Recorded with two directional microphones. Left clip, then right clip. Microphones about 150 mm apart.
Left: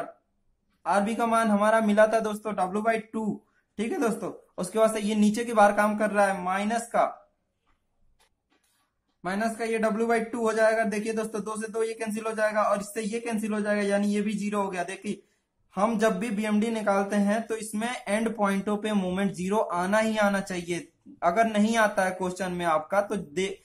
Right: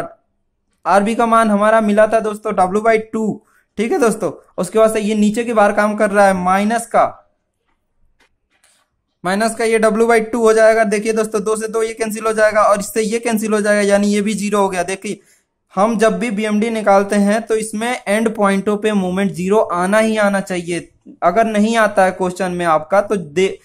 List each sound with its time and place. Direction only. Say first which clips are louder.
0.8 s speech: right 12 dB; 45° right (ahead or behind); by 2.5 s 30° right (ahead or behind)
2.5 s speech: right 14 dB; 40° right (ahead or behind)
9.2 s a man's voice: right 13 dB; 50° right (ahead or behind); by 23.5 s 35° right (ahead or behind)